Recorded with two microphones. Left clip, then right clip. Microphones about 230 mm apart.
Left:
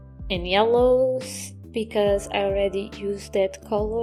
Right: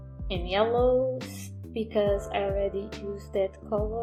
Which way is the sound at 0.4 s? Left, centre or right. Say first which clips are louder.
Left 6 dB; left.